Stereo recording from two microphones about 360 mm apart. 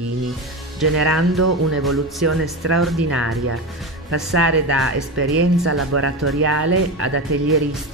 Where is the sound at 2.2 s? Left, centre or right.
Right.